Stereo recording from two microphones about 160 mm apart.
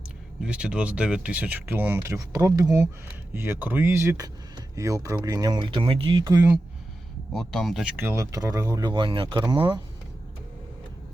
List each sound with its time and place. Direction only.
0.4 s speech: 5° right (ahead or behind); by 6.2 s 30° right (ahead or behind)
6.2 s speech: 15° right (ahead or behind)
7.3 s speech: centre (ahead or behind)
7.9 s speech: 15° right (ahead or behind)